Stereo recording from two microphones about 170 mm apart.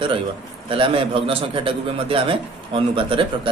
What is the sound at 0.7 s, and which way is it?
Speech, 30° right (ahead or behind).